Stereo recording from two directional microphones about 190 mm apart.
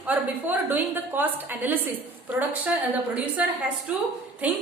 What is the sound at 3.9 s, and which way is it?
Speech, 5° right (ahead or behind).